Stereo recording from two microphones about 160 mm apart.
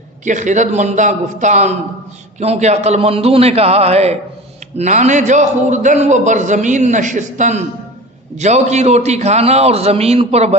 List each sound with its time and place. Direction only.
0.3 s a man's voice: 50° right (ahead or behind)